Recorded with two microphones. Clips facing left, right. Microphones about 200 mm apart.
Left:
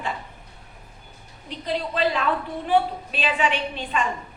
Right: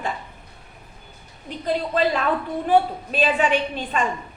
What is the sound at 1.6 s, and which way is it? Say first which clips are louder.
A woman's voice: right 3 dB; 45° right (ahead or behind).